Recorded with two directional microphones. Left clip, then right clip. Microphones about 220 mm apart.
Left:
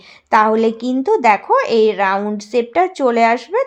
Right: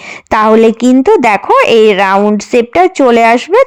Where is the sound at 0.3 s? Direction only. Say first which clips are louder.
Right 6 dB; 40° right (ahead or behind).